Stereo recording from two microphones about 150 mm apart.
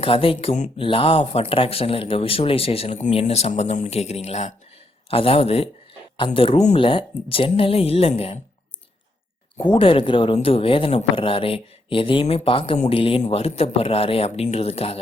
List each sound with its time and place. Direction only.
0.0 s speech: 35° left (ahead or behind)
9.7 s speech: 35° left (ahead or behind)